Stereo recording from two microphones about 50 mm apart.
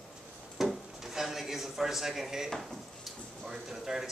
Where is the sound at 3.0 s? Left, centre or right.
Centre.